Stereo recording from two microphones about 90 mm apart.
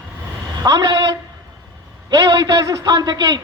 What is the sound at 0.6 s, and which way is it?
A man's voice, 50° right (ahead or behind).